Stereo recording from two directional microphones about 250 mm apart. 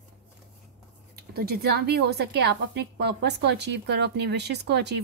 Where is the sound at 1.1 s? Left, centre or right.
Right.